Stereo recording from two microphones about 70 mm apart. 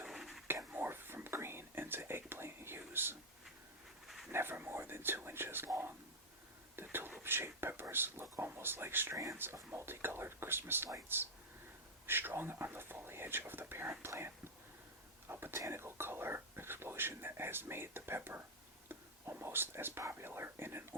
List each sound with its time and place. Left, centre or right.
0.1 s whispering: centre
0.4 s whispering: right
4.0 s dog: centre
4.3 s whispering: right
8.5 s speech: right
15.3 s a sound: right
15.6 s speech: right